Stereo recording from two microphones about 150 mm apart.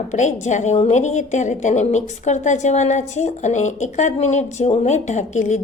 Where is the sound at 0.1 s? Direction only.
55° left (ahead or behind).